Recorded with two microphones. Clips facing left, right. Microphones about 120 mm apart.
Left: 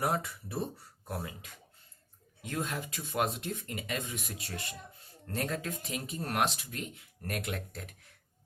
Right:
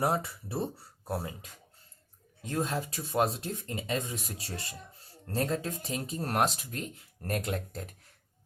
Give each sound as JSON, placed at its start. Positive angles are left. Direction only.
{"t": 0.0, "sound": "speech", "side_deg": -30}